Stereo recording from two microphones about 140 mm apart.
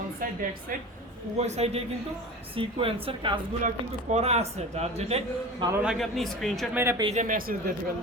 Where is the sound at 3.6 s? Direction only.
55° right (ahead or behind).